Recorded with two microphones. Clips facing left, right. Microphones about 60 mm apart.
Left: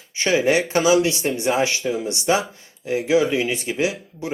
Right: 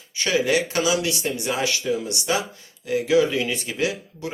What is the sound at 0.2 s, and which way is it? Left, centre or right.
Speech, left.